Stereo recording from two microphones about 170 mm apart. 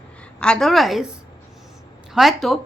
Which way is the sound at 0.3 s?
5° left (ahead or behind).